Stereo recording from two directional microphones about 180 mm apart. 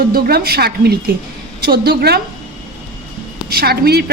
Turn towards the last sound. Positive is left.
turn(degrees=-60)  # may be behind; listen again after turning